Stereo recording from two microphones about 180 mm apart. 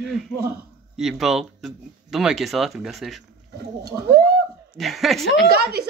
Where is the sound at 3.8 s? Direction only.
60° right (ahead or behind).